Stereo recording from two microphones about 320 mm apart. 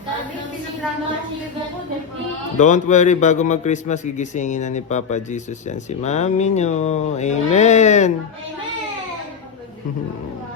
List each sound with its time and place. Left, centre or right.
2.6 s a man's voice: left